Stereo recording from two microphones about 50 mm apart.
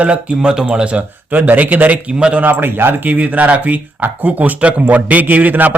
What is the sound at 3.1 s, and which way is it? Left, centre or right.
Speech, right.